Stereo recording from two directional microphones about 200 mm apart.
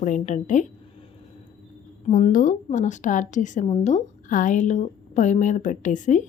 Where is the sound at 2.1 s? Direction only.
45° left (ahead or behind).